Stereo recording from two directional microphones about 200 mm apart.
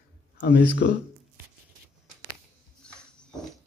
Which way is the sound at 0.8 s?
50° left (ahead or behind).